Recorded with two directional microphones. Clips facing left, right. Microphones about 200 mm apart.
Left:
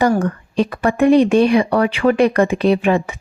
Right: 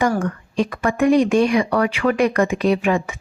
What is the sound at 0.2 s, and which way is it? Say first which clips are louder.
A woman's voice: left 3 dB; 35° left (ahead or behind).